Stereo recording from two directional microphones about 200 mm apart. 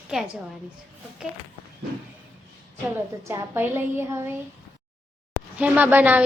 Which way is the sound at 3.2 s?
10° right (ahead or behind).